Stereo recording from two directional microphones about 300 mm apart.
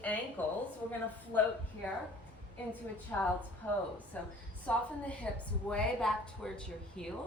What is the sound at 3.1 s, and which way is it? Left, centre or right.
A woman's voice, centre.